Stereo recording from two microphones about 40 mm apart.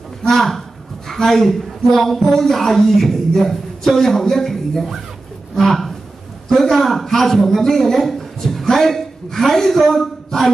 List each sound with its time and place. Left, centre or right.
0.3 s a woman's voice: centre